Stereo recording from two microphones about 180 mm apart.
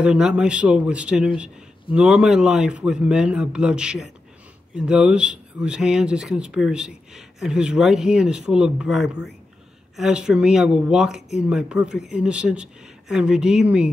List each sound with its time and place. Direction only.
0.0 s speech: 5° right (ahead or behind)